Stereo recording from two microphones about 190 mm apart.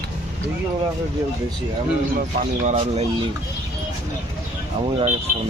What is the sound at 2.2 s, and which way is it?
Speech, 40° right (ahead or behind).